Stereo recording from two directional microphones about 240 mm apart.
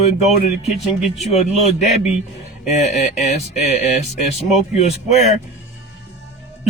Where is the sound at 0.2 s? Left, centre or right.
Left.